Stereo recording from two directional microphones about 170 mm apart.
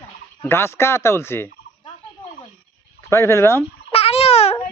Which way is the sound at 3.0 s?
15° left (ahead or behind).